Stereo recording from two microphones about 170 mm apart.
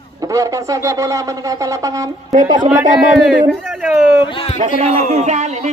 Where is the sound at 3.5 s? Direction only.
Centre (ahead or behind).